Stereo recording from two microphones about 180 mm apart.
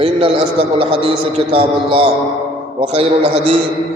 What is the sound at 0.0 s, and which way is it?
A man's voice, 30° right (ahead or behind).